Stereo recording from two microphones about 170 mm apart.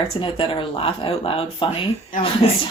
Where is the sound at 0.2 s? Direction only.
30° left (ahead or behind).